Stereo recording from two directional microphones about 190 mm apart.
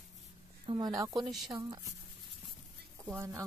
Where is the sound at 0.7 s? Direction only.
25° right (ahead or behind).